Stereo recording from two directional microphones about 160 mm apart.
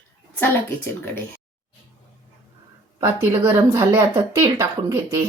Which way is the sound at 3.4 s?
15° right (ahead or behind).